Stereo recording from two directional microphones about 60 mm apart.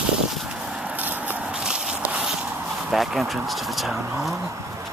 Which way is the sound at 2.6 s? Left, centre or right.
Centre.